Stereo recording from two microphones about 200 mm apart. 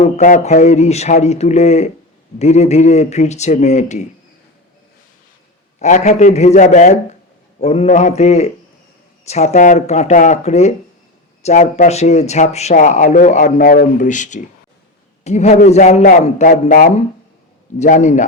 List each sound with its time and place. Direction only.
0.0 s speech: 40° left (ahead or behind)
5.8 s speech: 35° left (ahead or behind)